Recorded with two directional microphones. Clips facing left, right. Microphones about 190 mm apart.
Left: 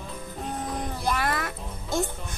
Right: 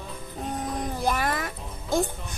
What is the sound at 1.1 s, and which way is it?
Music, 15° right (ahead or behind).